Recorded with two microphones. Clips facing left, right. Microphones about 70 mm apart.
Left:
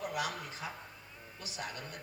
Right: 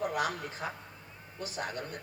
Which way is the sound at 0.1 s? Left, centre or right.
Right.